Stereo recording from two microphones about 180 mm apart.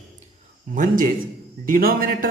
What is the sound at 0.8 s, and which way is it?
Speech, 50° right (ahead or behind).